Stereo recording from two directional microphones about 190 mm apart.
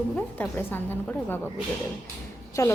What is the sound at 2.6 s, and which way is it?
Speech, 15° left (ahead or behind).